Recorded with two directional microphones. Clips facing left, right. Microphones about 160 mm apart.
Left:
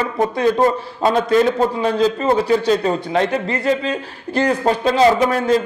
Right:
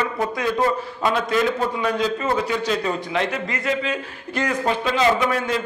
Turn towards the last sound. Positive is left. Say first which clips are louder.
# left 5 dB
turn(degrees=35)  # may be behind; listen again after turning